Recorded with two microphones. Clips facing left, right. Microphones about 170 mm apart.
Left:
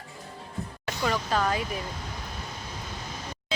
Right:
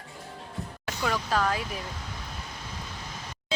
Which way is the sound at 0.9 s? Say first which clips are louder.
Left 1 dB; centre (ahead or behind).